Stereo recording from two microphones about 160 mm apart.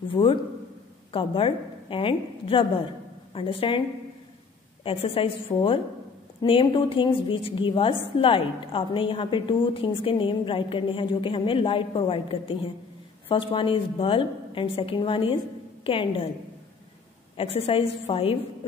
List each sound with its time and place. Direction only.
0.1 s a woman's voice: 30° left (ahead or behind)
4.8 s a woman's voice: 35° left (ahead or behind)
17.4 s a woman's voice: 35° left (ahead or behind)